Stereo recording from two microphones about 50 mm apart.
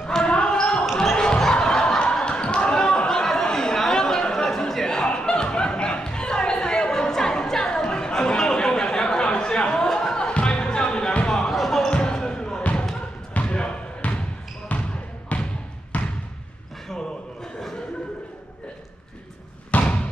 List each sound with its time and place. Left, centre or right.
0.0 s basketball bounce: centre
1.1 s a sound: centre
3.1 s chatter: centre
10.1 s music: centre
11.5 s basketball bounce: centre
11.9 s basketball bounce: centre
14.7 s basketball bounce: left
19.7 s a sound: left